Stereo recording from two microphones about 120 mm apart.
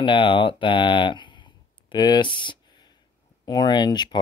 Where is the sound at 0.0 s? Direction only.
45° left (ahead or behind).